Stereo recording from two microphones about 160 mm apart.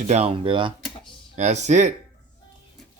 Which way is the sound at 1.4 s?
45° right (ahead or behind).